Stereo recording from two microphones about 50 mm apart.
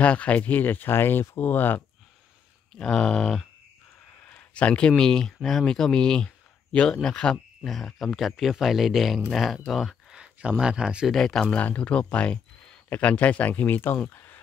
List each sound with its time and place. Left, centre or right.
0.0 s speech: left
2.7 s speech: centre
4.2 s speech: left; by 7.3 s centre
7.6 s speech: centre
10.1 s a sound: centre
10.6 s speech: centre
11.1 s speech: centre
11.5 s speech: left